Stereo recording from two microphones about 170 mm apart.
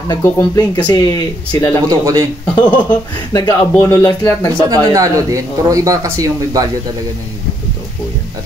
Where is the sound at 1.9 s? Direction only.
20° right (ahead or behind).